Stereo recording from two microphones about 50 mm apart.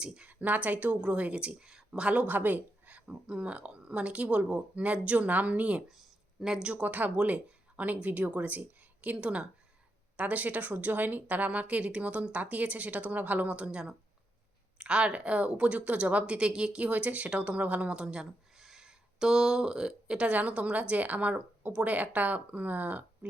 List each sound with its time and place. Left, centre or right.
0.0 s a woman's voice: centre
0.3 s speech: right; by 2.0 s centre
2.0 s speech: right
5.9 s speech: centre
6.8 s speech: right